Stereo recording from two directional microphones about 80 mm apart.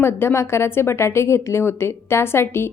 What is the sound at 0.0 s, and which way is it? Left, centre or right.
A woman's voice, left.